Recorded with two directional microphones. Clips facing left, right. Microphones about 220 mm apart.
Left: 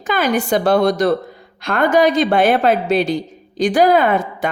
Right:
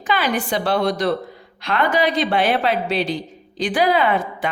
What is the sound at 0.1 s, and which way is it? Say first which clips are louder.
A woman's voice: left 4 dB; 45° left (ahead or behind).